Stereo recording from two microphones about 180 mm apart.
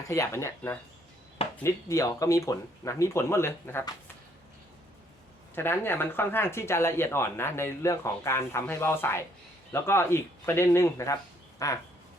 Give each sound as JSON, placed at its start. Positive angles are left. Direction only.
{"t": 0.1, "sound": "speech", "side_deg": 15}
{"t": 5.5, "sound": "speech", "side_deg": 10}